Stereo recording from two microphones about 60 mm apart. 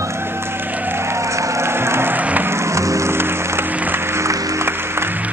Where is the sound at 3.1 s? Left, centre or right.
Right.